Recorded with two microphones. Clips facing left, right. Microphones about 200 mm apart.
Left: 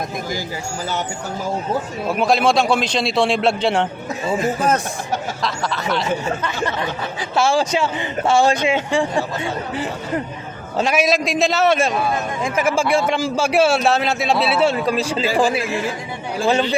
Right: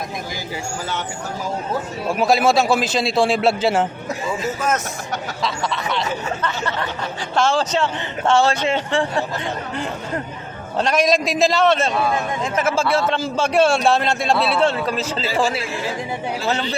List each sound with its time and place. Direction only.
2.0 s a man's voice: centre (ahead or behind)
4.6 s speech: 35° left (ahead or behind)
5.4 s a man's voice: centre (ahead or behind)
7.3 s a man's voice: 10° left (ahead or behind)